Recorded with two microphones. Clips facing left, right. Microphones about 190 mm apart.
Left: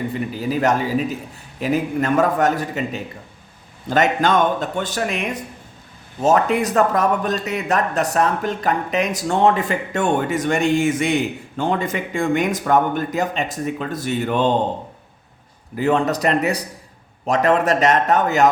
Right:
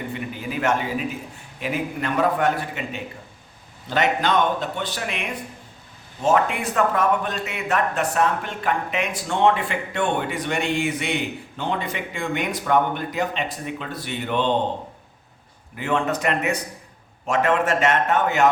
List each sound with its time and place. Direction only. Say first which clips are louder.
0.1 s a man's voice: left 6 dB; 35° left (ahead or behind)
15.7 s a man's voice: left 5 dB; 35° left (ahead or behind)